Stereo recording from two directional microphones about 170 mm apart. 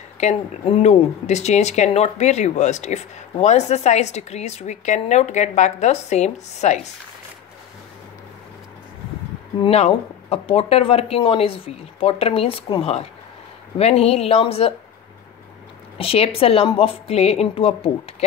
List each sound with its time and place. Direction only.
0.2 s speech: 40° left (ahead or behind)
9.6 s speech: 35° left (ahead or behind)
16.0 s speech: 35° left (ahead or behind)